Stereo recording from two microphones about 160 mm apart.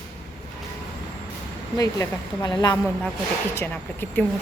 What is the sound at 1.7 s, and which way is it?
A woman's voice, 20° left (ahead or behind).